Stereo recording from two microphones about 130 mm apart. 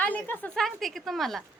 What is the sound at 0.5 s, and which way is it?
Speech, centre (ahead or behind).